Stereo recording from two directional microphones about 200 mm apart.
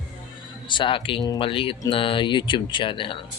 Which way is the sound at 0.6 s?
25° left (ahead or behind).